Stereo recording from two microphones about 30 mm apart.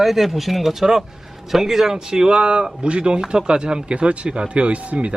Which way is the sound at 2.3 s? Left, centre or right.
Right.